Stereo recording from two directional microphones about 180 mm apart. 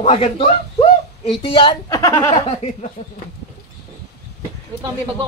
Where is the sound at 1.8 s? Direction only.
15° left (ahead or behind).